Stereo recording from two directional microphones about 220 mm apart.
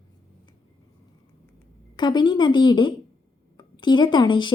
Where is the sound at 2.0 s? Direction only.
20° left (ahead or behind).